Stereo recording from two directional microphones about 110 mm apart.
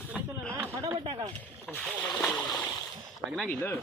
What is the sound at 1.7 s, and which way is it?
Splash, 20° left (ahead or behind).